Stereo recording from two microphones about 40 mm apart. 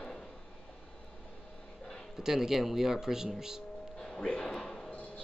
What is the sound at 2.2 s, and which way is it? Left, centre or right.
Speech, centre.